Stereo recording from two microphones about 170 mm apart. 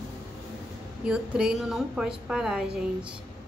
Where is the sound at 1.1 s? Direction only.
5° right (ahead or behind).